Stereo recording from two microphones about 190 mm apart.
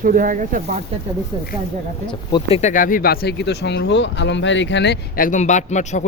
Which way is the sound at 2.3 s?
35° left (ahead or behind).